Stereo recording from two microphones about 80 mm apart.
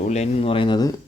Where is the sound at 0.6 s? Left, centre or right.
Left.